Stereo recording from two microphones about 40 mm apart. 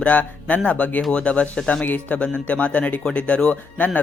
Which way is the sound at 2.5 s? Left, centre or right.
Left.